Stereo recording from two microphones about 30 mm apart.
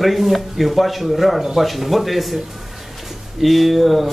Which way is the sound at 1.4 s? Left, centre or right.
Centre.